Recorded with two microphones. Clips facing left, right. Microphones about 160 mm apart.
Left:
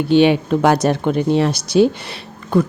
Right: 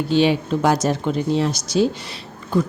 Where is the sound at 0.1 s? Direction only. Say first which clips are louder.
Left 5 dB; 60° left (ahead or behind).